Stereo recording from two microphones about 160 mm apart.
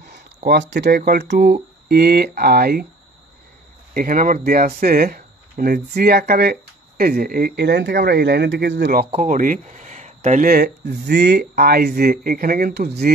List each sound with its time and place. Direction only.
0.5 s speech: 90° right
0.8 s speech: 75° right (ahead or behind)
3.9 s speech: 60° right (ahead or behind); by 9.0 s 90° right
9.1 s speech: 50° right (ahead or behind); by 13.1 s 90° right